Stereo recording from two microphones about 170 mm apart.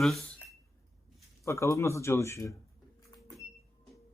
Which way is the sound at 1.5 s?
15° left (ahead or behind).